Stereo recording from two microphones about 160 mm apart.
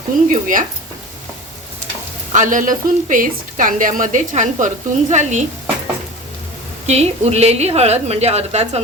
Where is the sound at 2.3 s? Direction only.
50° right (ahead or behind).